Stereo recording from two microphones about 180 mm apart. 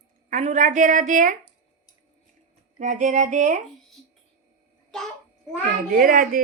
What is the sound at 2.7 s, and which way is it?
Speech, 45° right (ahead or behind).